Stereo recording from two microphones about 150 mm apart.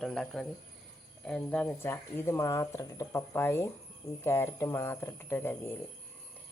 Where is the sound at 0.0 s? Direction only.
5° left (ahead or behind).